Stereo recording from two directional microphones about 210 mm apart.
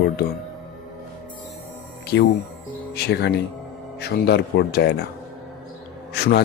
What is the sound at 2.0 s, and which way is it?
Music, 50° left (ahead or behind).